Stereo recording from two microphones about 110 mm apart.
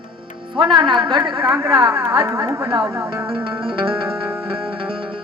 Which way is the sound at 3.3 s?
50° right (ahead or behind).